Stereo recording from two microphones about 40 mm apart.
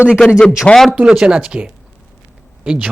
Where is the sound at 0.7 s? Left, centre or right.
Centre.